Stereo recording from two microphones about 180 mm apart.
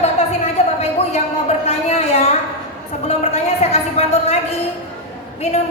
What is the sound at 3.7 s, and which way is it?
Speech, 35° left (ahead or behind).